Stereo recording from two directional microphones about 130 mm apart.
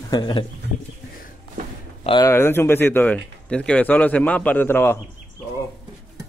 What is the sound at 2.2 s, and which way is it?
Speech, 20° left (ahead or behind).